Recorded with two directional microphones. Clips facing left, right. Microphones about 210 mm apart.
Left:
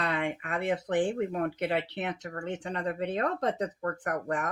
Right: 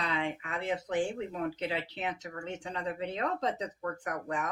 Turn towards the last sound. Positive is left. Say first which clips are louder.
# left 4 dB
turn(degrees=55)  # may be behind; listen again after turning